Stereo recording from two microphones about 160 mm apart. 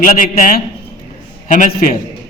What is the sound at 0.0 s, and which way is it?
A man's voice, 60° left (ahead or behind).